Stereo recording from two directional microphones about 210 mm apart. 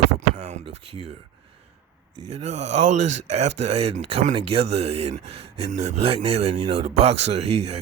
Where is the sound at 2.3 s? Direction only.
30° right (ahead or behind).